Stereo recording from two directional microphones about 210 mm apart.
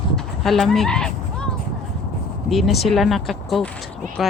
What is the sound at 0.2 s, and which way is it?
Honk, centre (ahead or behind).